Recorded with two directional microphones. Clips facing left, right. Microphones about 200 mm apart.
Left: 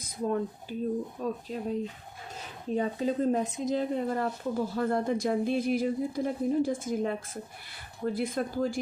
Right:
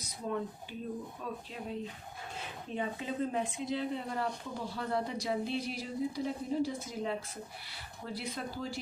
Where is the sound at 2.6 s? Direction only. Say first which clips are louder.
Left 9 dB; 40° left (ahead or behind).